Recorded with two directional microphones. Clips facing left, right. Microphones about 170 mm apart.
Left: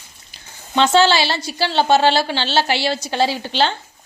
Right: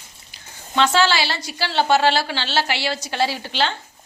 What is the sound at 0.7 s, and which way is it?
A woman's voice, 25° left (ahead or behind).